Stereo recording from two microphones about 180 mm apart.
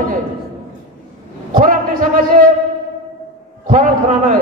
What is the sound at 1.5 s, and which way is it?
Speech, 50° right (ahead or behind).